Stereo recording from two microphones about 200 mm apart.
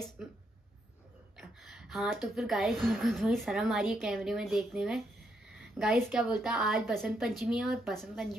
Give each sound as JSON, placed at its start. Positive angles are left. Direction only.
{"t": 0.2, "sound": "a woman's voice", "side_deg": -5}
{"t": 1.6, "sound": "a woman's voice", "side_deg": 0}